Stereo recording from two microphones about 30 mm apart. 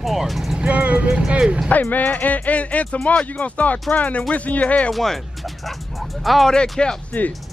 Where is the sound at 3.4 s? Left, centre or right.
Left.